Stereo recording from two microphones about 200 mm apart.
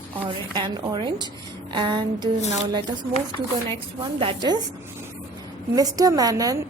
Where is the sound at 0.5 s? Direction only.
20° right (ahead or behind).